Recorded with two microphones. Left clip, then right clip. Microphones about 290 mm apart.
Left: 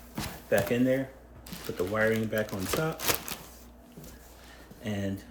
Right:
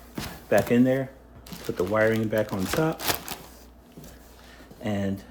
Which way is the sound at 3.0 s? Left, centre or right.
Centre.